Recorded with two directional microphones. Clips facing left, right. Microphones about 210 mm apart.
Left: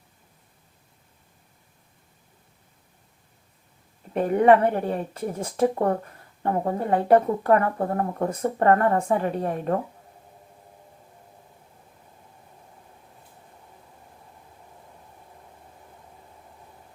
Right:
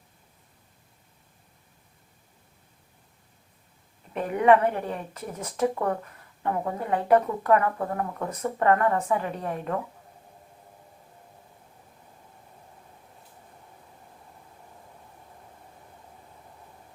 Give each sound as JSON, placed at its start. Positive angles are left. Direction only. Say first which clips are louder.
{"t": 4.1, "sound": "speech", "louder": "left 3 dB", "side_deg": 35}